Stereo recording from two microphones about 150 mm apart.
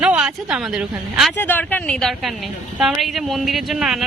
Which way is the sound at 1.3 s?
15° left (ahead or behind).